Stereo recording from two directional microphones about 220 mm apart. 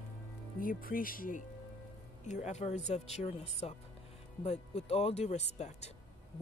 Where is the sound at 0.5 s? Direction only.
40° left (ahead or behind).